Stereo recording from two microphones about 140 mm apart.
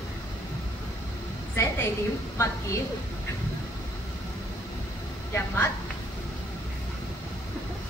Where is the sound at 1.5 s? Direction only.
20° left (ahead or behind).